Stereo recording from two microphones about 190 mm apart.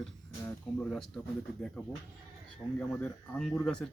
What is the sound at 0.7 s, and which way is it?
Speech, 5° left (ahead or behind).